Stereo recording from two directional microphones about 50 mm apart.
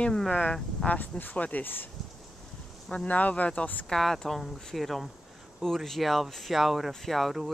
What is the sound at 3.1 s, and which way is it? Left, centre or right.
Speech, left.